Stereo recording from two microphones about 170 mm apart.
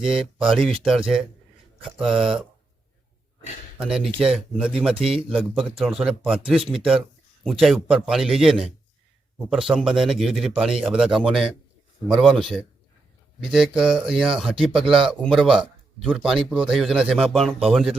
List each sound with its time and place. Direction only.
0.3 s speech: 5° right (ahead or behind)
3.8 s speech: 5° right (ahead or behind)
4.9 s speech: 35° right (ahead or behind)
5.3 s speech: 5° right (ahead or behind)
13.4 s speech: centre (ahead or behind)